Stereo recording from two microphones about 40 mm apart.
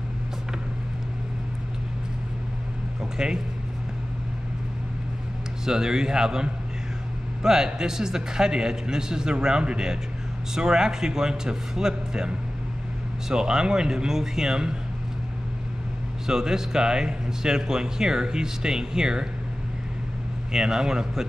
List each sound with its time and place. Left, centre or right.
3.0 s a sound: centre
5.7 s speech: centre
16.3 s speech: centre
20.5 s speech: centre